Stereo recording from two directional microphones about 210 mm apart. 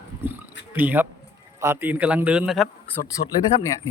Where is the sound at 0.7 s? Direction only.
10° right (ahead or behind).